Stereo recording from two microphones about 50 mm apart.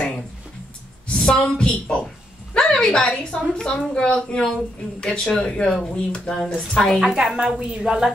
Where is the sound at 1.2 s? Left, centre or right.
Centre.